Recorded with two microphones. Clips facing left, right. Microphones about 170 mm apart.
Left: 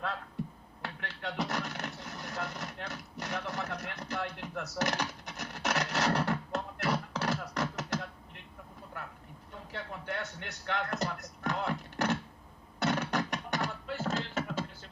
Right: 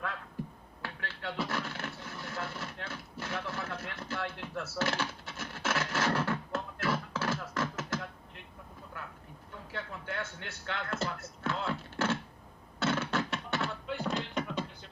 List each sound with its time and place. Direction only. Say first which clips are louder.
1.0 s a sound: left 1 dB; 20° left (ahead or behind)
3.2 s speech: left 1 dB; 20° left (ahead or behind)
3.7 s music: left 1 dB; 20° left (ahead or behind)
9.7 s speech: even; 20° left (ahead or behind)
12.8 s beatboxing: even; 15° left (ahead or behind)
13.9 s beatboxing: even; centre (ahead or behind)